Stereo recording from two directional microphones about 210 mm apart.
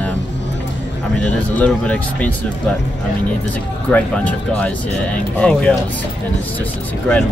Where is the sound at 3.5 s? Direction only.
5° left (ahead or behind).